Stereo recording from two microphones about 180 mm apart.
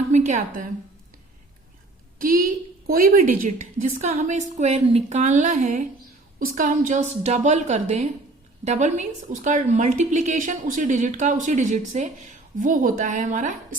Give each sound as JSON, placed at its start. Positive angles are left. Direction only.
{"t": 0.1, "sound": "a woman's voice", "side_deg": -40}
{"t": 2.1, "sound": "a woman's voice", "side_deg": -50}